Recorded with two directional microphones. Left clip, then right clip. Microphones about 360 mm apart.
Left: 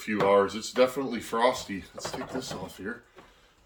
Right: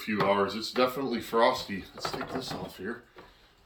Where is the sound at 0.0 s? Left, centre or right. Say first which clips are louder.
Left 4 dB; centre.